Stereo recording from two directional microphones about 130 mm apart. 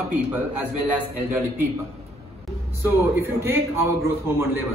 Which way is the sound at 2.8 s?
15° right (ahead or behind).